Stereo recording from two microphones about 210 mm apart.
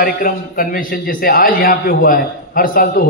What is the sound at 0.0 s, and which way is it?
A man's voice, 40° left (ahead or behind).